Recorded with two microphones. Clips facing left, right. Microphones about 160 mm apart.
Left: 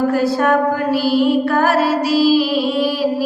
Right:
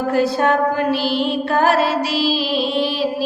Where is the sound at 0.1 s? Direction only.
20° right (ahead or behind).